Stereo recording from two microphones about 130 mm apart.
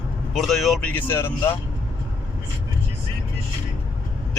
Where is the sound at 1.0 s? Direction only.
20° left (ahead or behind).